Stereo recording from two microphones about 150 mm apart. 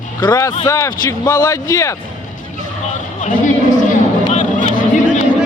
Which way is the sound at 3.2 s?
60° left (ahead or behind).